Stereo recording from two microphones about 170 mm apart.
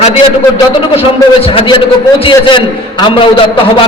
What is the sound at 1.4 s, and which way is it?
A man's voice, 30° left (ahead or behind).